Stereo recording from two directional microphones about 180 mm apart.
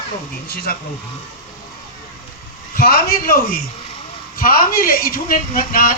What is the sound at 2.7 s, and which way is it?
Speech, 55° left (ahead or behind).